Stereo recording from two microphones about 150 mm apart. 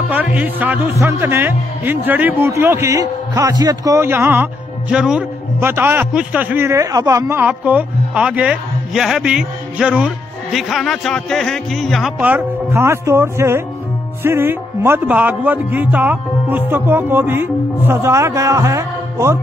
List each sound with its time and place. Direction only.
0.1 s a man's voice: 10° right (ahead or behind)
12.2 s a man's voice: 10° right (ahead or behind)